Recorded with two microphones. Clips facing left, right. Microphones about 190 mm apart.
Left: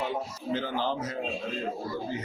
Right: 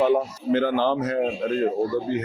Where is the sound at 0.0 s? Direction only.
65° right (ahead or behind).